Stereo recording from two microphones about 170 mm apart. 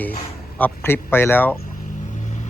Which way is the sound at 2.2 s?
45° left (ahead or behind).